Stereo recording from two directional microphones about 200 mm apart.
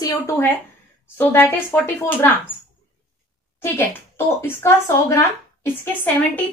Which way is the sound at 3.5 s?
10° left (ahead or behind).